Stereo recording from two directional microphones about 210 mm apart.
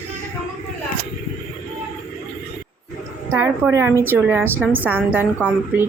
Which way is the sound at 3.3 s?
10° right (ahead or behind).